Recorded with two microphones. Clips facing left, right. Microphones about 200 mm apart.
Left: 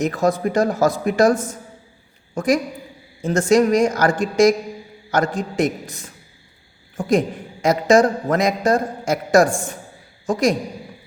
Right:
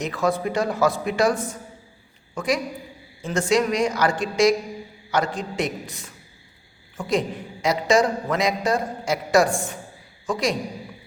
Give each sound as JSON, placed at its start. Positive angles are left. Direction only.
{"t": 0.0, "sound": "a woman's voice", "side_deg": 45}